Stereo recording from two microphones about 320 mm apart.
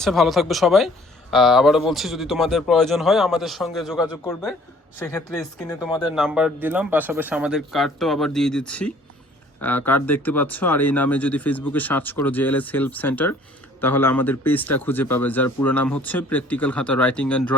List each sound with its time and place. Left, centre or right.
0.0 s speech: centre
4.0 s speech: centre